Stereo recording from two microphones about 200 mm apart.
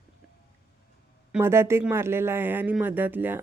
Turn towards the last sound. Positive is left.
turn(degrees=-10)  # may be behind; listen again after turning